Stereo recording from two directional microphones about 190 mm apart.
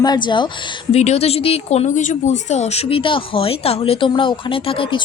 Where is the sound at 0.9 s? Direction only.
35° left (ahead or behind).